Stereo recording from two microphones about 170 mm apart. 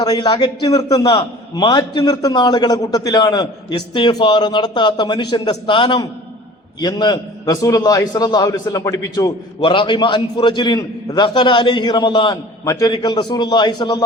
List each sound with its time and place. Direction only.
0.0 s a man's voice: 25° left (ahead or behind)